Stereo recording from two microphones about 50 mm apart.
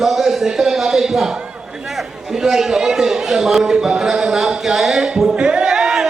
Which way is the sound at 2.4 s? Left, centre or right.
Centre.